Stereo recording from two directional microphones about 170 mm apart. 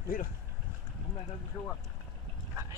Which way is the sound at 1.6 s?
20° left (ahead or behind).